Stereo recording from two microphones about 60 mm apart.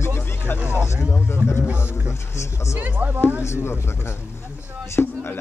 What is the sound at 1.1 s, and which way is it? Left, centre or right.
Speech, left.